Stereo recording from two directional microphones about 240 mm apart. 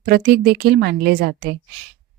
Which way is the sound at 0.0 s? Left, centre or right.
Right.